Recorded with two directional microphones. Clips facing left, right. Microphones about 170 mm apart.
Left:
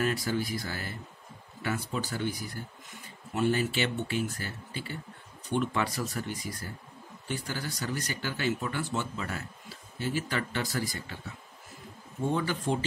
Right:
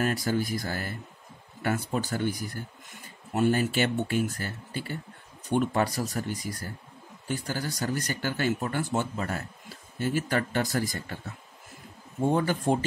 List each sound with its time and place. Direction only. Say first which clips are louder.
0.0 s speech: right 2 dB; 45° right (ahead or behind)
3.3 s speech: right 3 dB; 45° right (ahead or behind)
12.3 s speech: right 5 dB; 45° right (ahead or behind)